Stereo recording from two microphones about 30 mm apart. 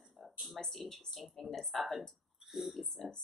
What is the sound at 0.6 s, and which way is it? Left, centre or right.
Speech, centre.